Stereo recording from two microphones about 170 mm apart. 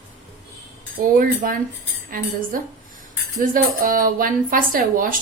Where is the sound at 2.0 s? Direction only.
55° right (ahead or behind).